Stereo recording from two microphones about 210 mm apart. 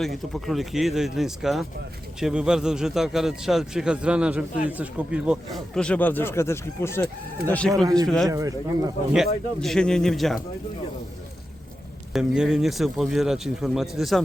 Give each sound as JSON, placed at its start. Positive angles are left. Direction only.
{"t": 0.0, "sound": "a man's voice", "side_deg": 0}
{"t": 8.3, "sound": "speech", "side_deg": -15}
{"t": 9.1, "sound": "a man's voice", "side_deg": 0}
{"t": 12.1, "sound": "a man's voice", "side_deg": 0}